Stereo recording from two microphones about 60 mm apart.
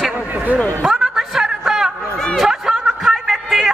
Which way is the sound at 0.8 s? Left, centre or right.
Centre.